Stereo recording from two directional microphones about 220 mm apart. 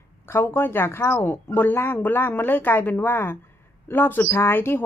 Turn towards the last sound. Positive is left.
turn(degrees=10)  # may be behind; listen again after turning